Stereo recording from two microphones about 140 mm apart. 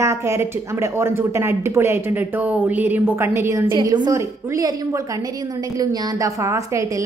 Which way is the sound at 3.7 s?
30° right (ahead or behind).